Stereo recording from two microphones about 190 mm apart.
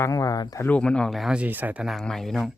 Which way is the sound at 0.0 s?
15° left (ahead or behind).